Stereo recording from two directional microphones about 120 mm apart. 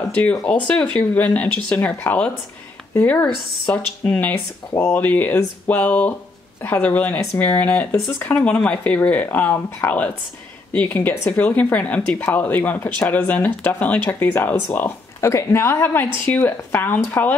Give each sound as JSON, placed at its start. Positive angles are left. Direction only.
{"t": 0.1, "sound": "speech", "side_deg": 10}